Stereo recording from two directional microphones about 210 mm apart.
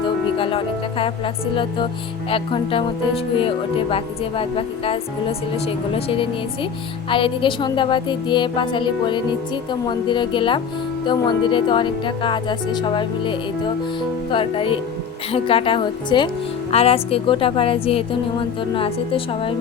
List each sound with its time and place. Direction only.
0.3 s a woman's voice: 25° left (ahead or behind)